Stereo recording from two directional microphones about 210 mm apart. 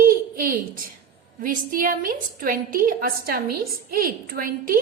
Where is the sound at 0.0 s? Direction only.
40° right (ahead or behind).